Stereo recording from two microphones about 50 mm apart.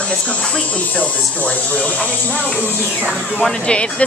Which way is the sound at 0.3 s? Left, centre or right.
Centre.